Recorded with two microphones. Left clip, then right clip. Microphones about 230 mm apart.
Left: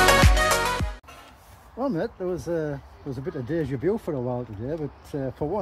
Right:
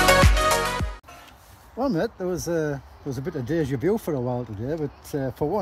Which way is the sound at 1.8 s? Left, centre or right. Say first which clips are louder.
Right 2 dB; right.